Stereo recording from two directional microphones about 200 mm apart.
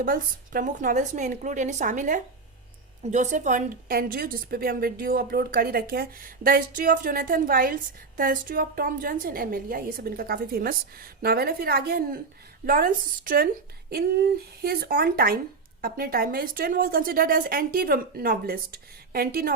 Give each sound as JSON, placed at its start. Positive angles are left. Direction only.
{"t": 0.0, "sound": "a woman's voice", "side_deg": -45}